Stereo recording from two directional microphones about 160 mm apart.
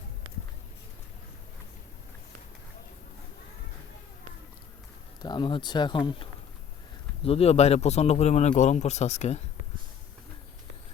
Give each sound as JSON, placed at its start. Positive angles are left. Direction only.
{"t": 5.2, "sound": "speech", "side_deg": 25}